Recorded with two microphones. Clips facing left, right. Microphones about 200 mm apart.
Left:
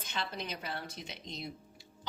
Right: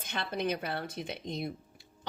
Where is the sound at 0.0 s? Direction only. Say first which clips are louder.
Right 6 dB; 55° right (ahead or behind).